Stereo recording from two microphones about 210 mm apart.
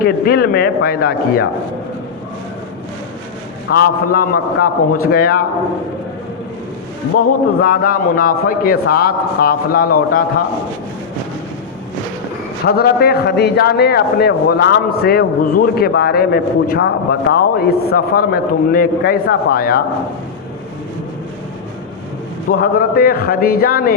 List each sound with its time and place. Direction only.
0.0 s a man's voice: 45° left (ahead or behind)
3.7 s a man's voice: 45° left (ahead or behind)
7.6 s a man's voice: 45° left (ahead or behind)
12.6 s a man's voice: 50° left (ahead or behind)
22.4 s a man's voice: 45° left (ahead or behind)